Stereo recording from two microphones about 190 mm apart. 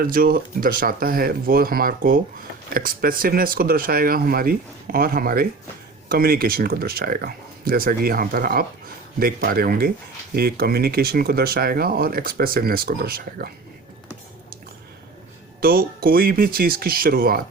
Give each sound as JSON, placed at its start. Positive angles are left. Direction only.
{"t": 0.0, "sound": "speech", "side_deg": -50}
{"t": 15.6, "sound": "speech", "side_deg": -50}